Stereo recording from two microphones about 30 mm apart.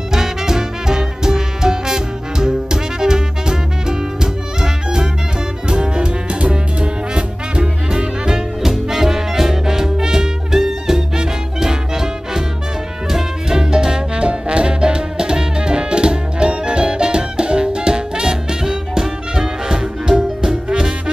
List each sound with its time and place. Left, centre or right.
0.1 s music: centre
8.6 s music: centre